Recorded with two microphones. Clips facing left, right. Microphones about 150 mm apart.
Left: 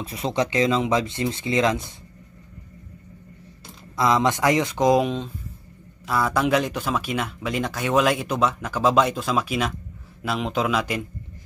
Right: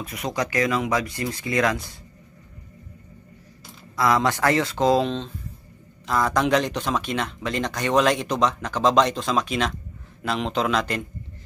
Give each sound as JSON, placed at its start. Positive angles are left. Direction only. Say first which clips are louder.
{"t": 0.0, "sound": "speech", "louder": "left 3 dB", "side_deg": 30}
{"t": 3.9, "sound": "speech", "louder": "left 1 dB", "side_deg": 20}